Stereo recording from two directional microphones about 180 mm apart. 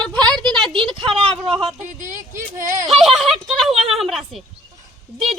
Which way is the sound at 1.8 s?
45° right (ahead or behind).